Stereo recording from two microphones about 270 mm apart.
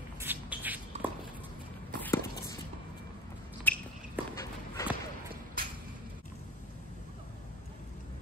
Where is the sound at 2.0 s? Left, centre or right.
Centre.